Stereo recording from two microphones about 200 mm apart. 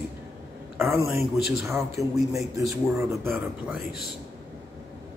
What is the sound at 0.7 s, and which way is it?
Speech, 10° right (ahead or behind).